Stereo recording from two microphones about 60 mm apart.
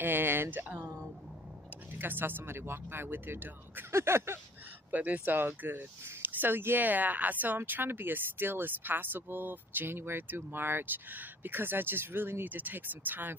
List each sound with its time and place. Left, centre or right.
0.0 s speech: right
1.9 s speech: right
3.9 s a sound: right
4.9 s speech: right